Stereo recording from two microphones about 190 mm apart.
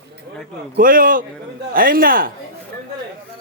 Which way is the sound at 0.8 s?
45° right (ahead or behind).